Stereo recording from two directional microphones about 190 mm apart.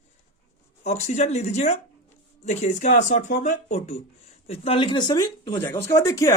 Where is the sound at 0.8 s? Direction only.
35° left (ahead or behind).